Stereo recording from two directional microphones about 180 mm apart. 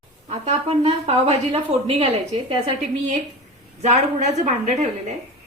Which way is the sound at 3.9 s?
40° right (ahead or behind).